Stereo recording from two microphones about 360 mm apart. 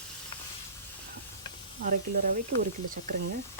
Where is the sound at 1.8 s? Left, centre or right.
Right.